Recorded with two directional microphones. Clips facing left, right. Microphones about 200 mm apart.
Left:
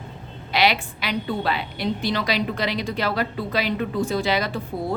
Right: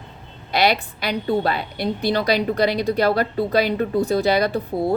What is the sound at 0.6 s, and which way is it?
A woman's voice, 45° right (ahead or behind).